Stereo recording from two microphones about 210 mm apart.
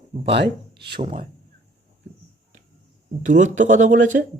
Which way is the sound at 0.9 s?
25° right (ahead or behind).